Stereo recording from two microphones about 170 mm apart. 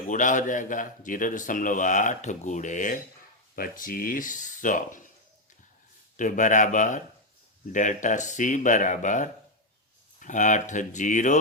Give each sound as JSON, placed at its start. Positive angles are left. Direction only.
{"t": 0.1, "sound": "a man's voice", "side_deg": 50}
{"t": 6.1, "sound": "a man's voice", "side_deg": 45}